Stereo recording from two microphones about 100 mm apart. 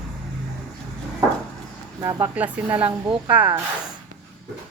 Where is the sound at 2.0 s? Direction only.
40° right (ahead or behind).